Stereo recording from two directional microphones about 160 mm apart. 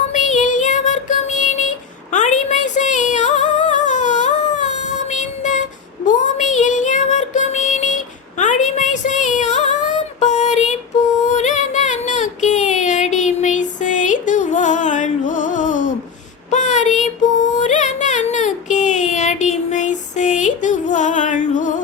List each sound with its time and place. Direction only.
0.1 s child singing: 50° left (ahead or behind)
2.1 s music: 50° left (ahead or behind)
6.1 s child singing: 50° left (ahead or behind)
11.3 s music: 45° left (ahead or behind)
16.5 s a sound: 50° left (ahead or behind)